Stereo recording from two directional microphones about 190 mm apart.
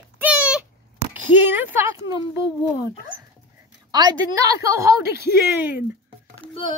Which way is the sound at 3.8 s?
20° right (ahead or behind).